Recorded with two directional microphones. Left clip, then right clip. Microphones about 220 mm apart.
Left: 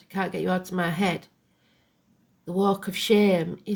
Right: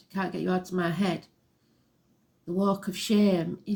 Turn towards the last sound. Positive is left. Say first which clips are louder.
# left 4 dB
turn(degrees=45)  # may be behind; listen again after turning